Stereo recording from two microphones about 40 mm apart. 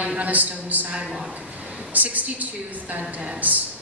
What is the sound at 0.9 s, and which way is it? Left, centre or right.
Speech, centre.